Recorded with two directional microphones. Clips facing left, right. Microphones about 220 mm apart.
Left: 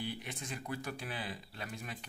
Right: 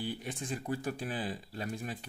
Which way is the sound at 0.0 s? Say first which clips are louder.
Right 4 dB; 40° right (ahead or behind).